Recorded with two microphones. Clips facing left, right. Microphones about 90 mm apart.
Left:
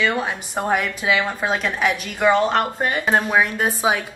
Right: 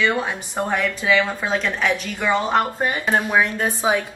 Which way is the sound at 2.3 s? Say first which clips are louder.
Left 1 dB; 10° right (ahead or behind).